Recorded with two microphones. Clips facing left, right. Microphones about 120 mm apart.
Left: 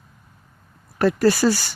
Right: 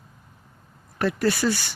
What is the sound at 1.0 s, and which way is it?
Speech, 40° left (ahead or behind).